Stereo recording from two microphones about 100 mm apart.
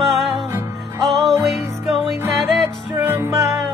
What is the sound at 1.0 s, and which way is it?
Music, centre (ahead or behind).